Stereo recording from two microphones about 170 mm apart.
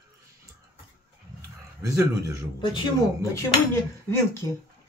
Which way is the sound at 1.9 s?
15° right (ahead or behind).